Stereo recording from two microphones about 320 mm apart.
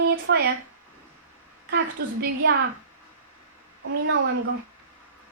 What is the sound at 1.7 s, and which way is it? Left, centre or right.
Speech, right.